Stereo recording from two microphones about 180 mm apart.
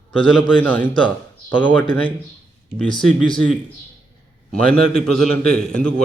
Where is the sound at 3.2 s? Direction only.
25° left (ahead or behind).